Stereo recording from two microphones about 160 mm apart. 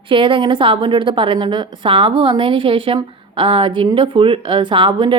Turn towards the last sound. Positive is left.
turn(degrees=-30)  # may be behind; listen again after turning